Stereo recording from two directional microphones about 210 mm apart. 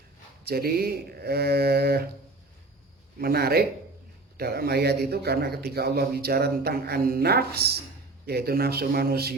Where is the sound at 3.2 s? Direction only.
45° right (ahead or behind).